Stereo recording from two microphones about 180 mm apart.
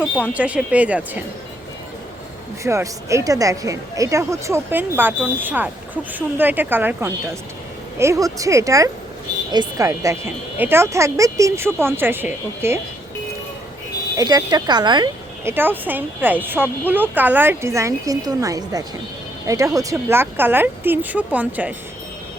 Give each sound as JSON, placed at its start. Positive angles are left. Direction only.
{"t": 0.0, "sound": "speech", "side_deg": -5}
{"t": 2.6, "sound": "a woman's voice", "side_deg": -15}
{"t": 14.2, "sound": "speech", "side_deg": -20}
{"t": 15.5, "sound": "speech", "side_deg": -10}